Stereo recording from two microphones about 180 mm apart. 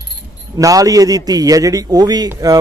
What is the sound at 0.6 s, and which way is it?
A man's voice, 20° right (ahead or behind).